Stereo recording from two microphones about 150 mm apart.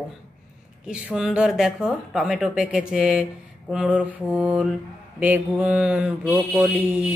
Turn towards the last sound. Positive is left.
turn(degrees=-10)  # may be behind; listen again after turning